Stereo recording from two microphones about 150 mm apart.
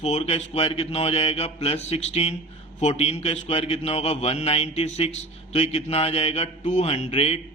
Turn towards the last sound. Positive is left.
turn(degrees=40)  # may be behind; listen again after turning